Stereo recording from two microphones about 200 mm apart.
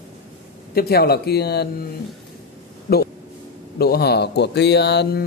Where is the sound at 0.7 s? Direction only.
50° left (ahead or behind).